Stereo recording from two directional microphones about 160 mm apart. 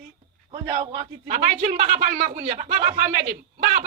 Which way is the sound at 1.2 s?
50° right (ahead or behind).